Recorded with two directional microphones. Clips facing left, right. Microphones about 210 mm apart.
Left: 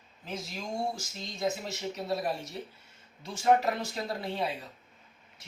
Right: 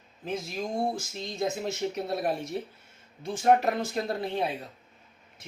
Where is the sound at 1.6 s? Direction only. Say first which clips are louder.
Right 5 dB; 55° right (ahead or behind).